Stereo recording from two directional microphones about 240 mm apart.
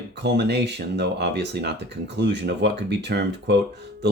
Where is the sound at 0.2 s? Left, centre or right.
Right.